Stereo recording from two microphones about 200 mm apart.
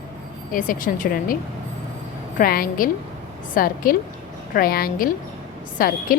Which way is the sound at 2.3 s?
45° left (ahead or behind).